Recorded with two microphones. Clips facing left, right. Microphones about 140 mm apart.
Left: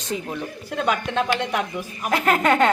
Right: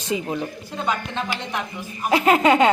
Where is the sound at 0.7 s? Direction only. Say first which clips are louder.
Left 4 dB; 70° left (ahead or behind).